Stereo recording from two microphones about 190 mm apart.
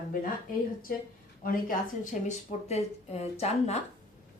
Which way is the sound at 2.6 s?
35° left (ahead or behind).